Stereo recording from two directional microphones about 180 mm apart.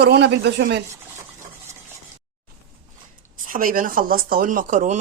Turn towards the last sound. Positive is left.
turn(degrees=-45)  # may be behind; listen again after turning